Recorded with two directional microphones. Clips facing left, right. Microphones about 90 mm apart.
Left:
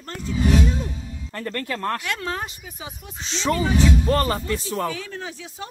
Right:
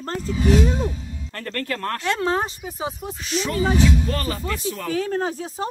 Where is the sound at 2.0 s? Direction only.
30° right (ahead or behind).